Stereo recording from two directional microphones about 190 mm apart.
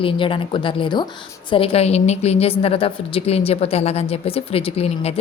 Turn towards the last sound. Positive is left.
turn(degrees=30)  # may be behind; listen again after turning